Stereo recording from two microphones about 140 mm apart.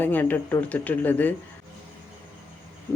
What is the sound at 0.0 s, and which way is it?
Speech, 15° left (ahead or behind).